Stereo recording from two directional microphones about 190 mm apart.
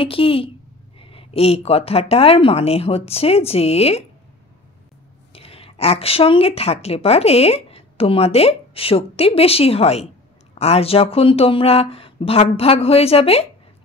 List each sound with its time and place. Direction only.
0.0 s a woman's voice: 30° left (ahead or behind)
5.3 s a woman's voice: 30° left (ahead or behind)